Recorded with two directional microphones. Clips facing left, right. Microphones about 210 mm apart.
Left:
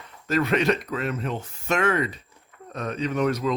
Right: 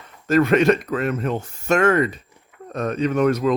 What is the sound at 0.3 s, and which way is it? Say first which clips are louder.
Speech: right 6 dB; 50° right (ahead or behind).